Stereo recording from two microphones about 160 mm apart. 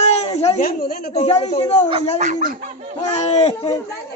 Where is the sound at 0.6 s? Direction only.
70° left (ahead or behind).